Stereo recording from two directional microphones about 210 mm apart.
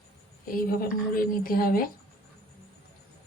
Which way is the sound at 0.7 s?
45° left (ahead or behind).